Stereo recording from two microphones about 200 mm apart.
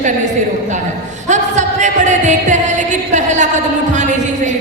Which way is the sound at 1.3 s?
35° right (ahead or behind).